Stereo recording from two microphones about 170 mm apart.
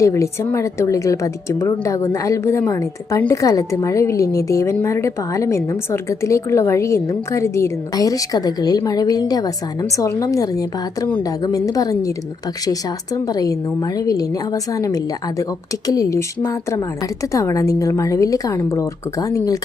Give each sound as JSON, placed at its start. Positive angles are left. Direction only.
{"t": 0.0, "sound": "a woman's voice", "side_deg": 15}
{"t": 13.2, "sound": "a woman's voice", "side_deg": 20}